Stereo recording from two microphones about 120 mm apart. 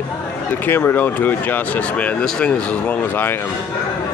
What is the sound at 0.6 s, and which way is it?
Speech, 20° left (ahead or behind).